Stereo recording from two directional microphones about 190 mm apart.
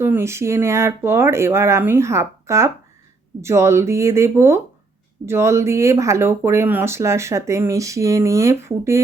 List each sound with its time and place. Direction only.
0.0 s speech: 10° right (ahead or behind)